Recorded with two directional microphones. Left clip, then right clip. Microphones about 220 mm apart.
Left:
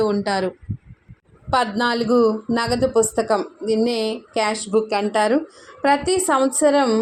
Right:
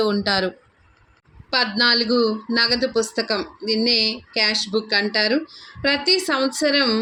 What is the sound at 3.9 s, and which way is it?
Speech, 30° left (ahead or behind).